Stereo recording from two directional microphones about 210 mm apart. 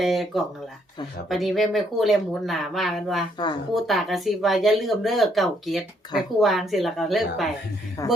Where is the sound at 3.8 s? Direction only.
Centre (ahead or behind).